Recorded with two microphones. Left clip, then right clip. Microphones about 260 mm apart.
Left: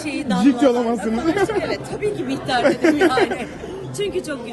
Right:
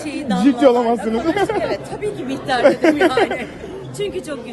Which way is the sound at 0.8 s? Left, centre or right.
Right.